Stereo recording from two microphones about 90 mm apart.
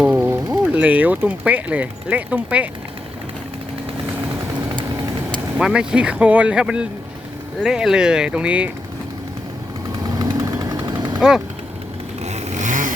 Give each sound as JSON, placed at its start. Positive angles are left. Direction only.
{"t": 0.0, "sound": "a sound", "side_deg": -10}
{"t": 0.3, "sound": "speech", "side_deg": -15}
{"t": 5.5, "sound": "speech", "side_deg": -10}
{"t": 10.3, "sound": "vehicle", "side_deg": -35}
{"t": 11.2, "sound": "speech", "side_deg": -10}